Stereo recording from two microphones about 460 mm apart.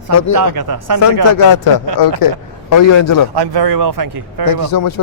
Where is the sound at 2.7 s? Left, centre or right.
Left.